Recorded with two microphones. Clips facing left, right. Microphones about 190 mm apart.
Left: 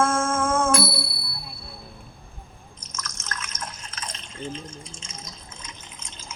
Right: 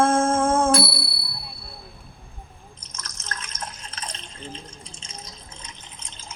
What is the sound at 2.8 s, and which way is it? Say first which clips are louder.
Drip: left 6 dB; 35° right (ahead or behind).